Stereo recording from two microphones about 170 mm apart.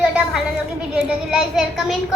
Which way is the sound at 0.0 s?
5° right (ahead or behind).